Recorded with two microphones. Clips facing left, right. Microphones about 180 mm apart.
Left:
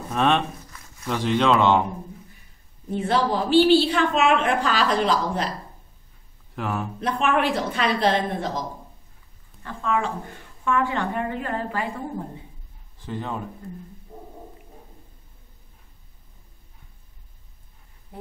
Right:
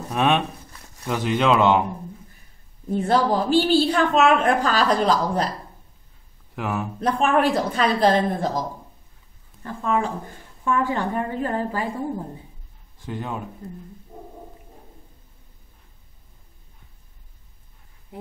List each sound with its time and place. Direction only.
0.1 s speech: 10° right (ahead or behind)
2.9 s a woman's voice: 45° right (ahead or behind)
6.5 s speech: 5° right (ahead or behind)
7.0 s a woman's voice: 40° right (ahead or behind)
13.0 s speech: 5° right (ahead or behind)